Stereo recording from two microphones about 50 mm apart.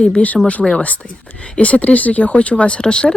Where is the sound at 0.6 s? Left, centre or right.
Centre.